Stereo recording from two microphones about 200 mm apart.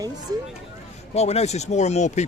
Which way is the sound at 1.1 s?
30° left (ahead or behind).